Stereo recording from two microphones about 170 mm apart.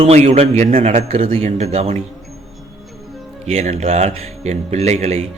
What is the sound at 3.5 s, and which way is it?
Speech, 40° right (ahead or behind).